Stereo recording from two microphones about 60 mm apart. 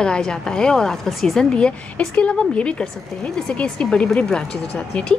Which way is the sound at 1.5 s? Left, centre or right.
Centre.